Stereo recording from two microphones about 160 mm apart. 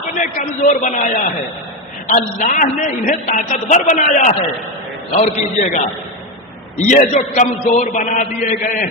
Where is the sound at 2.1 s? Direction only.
50° left (ahead or behind).